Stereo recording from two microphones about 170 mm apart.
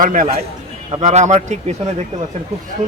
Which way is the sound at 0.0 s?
50° right (ahead or behind).